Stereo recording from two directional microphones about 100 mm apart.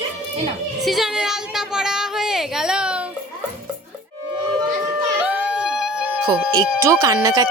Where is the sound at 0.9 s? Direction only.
5° right (ahead or behind).